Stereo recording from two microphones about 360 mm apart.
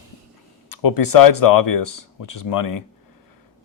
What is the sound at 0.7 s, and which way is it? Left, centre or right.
Speech, left.